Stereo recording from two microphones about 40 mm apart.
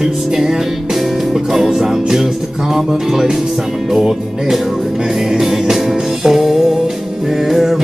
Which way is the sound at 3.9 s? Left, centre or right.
Centre.